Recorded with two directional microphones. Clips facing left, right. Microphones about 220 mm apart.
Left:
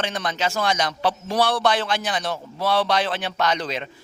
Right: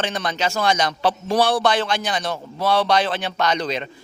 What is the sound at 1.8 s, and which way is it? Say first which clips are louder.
A man's voice: right 2 dB; centre (ahead or behind).